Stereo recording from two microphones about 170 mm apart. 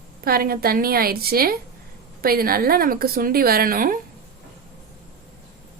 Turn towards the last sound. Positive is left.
turn(degrees=-55)  # may be behind; listen again after turning